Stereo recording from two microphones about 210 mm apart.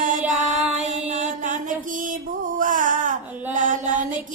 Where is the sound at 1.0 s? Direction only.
30° right (ahead or behind).